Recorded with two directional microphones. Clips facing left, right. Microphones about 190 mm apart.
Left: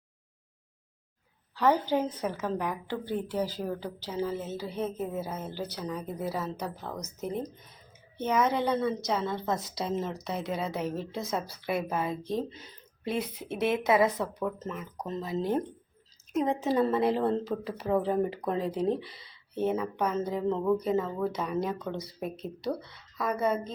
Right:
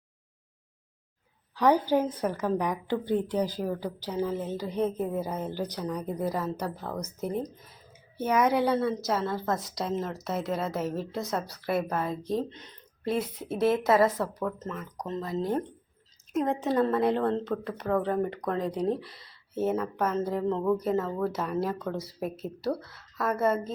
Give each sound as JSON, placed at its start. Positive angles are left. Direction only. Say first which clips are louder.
{"t": 1.5, "sound": "a woman's voice", "louder": "right 2 dB", "side_deg": -15}
{"t": 14.4, "sound": "a woman's voice", "louder": "even", "side_deg": 10}